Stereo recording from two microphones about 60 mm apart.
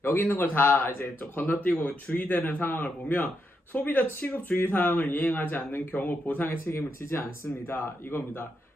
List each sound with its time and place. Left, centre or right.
0.0 s speech: left
6.5 s speech: left